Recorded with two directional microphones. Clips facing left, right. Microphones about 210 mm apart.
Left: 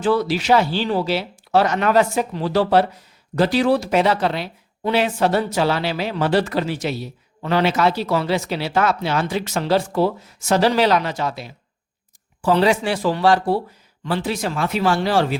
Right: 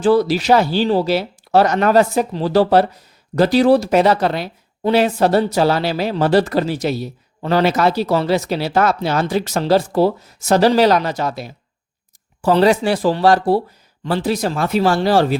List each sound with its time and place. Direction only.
0.0 s speech: 35° right (ahead or behind)